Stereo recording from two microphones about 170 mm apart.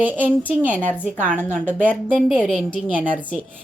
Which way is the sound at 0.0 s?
10° right (ahead or behind).